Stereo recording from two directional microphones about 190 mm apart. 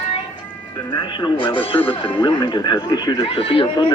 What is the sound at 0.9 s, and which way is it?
Speech, 25° left (ahead or behind).